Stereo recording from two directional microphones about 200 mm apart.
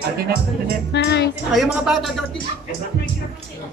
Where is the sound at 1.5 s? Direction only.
Centre (ahead or behind).